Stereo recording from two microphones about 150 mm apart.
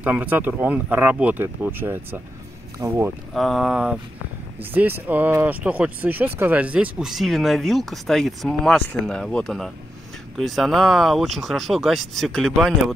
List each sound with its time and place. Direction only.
0.0 s speech: 10° right (ahead or behind)
2.8 s speech: 25° right (ahead or behind)
3.3 s speech: centre (ahead or behind)